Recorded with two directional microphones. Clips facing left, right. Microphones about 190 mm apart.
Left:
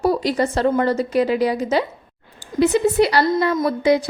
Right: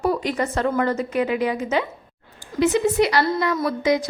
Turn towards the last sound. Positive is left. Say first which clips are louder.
# left 3 dB
turn(degrees=30)  # may be behind; listen again after turning